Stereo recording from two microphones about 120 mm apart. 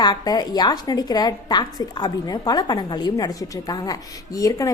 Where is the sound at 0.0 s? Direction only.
35° left (ahead or behind).